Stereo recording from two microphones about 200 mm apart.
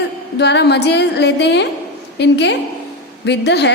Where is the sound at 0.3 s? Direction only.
60° left (ahead or behind).